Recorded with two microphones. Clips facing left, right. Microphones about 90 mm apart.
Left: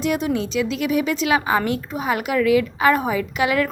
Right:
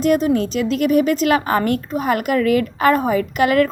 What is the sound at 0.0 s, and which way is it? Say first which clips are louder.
A woman's voice: right 6 dB; 40° right (ahead or behind).